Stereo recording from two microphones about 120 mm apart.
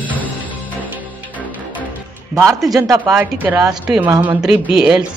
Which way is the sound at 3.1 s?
15° right (ahead or behind).